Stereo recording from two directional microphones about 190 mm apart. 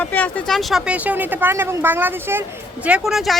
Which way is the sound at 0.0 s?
10° left (ahead or behind).